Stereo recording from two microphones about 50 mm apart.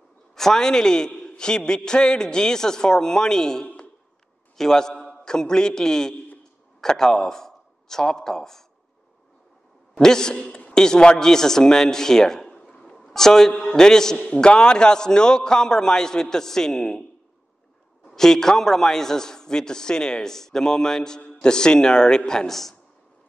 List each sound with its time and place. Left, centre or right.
0.3 s a man's voice: centre
3.6 s a sound: left
4.6 s a man's voice: centre
9.9 s a man's voice: centre
18.0 s a man's voice: centre